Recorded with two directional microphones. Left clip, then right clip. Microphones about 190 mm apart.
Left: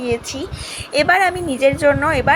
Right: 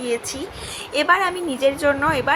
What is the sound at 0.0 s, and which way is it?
Speech, 45° left (ahead or behind).